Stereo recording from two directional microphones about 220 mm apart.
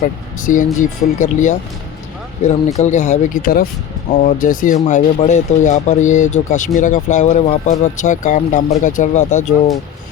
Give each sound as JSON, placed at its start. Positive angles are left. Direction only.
{"t": 0.0, "sound": "speech", "side_deg": 35}
{"t": 2.7, "sound": "speech", "side_deg": 35}